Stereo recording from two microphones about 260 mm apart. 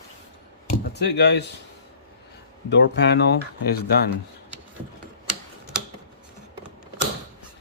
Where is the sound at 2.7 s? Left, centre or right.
Left.